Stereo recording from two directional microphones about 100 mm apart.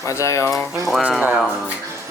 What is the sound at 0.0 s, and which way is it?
Speech, 30° left (ahead or behind).